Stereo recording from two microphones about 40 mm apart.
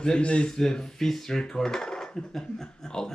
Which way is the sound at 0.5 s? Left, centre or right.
Centre.